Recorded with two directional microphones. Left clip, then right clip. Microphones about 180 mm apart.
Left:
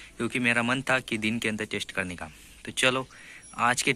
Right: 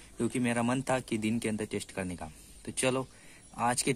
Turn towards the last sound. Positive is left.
turn(degrees=-5)  # may be behind; listen again after turning